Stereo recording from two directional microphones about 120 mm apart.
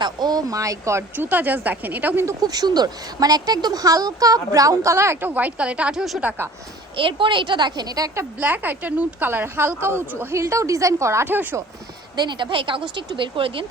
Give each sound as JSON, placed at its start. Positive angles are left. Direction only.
{"t": 0.0, "sound": "a woman's voice", "side_deg": -35}
{"t": 2.2, "sound": "speech", "side_deg": -30}
{"t": 6.9, "sound": "a woman's voice", "side_deg": -45}
{"t": 8.4, "sound": "speech", "side_deg": -15}
{"t": 12.1, "sound": "speech", "side_deg": -40}